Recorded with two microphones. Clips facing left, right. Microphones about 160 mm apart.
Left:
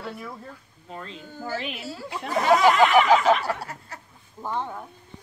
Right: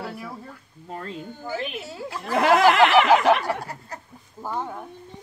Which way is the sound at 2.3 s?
65° right (ahead or behind).